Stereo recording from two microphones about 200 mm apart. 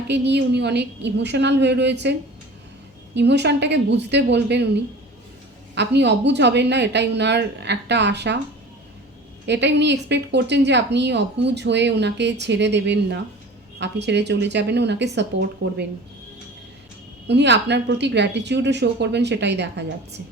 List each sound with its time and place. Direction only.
0.1 s a woman's voice: 60° right (ahead or behind)
3.2 s a woman's voice: 60° right (ahead or behind)
5.7 s a woman's voice: 60° right (ahead or behind)
9.5 s a woman's voice: 60° right (ahead or behind)
17.2 s a woman's voice: 60° right (ahead or behind)